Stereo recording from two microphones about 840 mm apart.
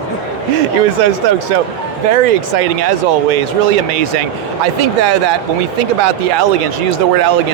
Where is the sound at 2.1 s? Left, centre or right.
Right.